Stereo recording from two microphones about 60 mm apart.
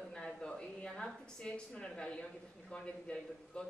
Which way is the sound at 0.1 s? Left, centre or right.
Centre.